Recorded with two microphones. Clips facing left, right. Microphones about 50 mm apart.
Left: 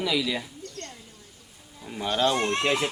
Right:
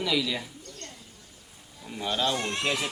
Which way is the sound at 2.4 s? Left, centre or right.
Left.